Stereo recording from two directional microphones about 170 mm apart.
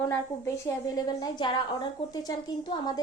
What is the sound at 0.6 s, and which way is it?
A woman's voice, 20° left (ahead or behind).